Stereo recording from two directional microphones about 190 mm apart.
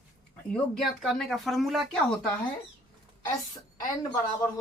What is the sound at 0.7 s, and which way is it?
Speech, centre (ahead or behind).